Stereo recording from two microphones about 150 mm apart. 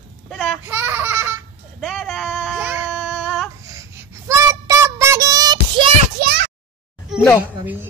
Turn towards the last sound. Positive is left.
turn(degrees=-10)  # may be behind; listen again after turning